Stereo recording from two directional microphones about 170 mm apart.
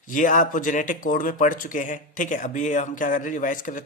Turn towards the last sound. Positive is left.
turn(degrees=50)  # may be behind; listen again after turning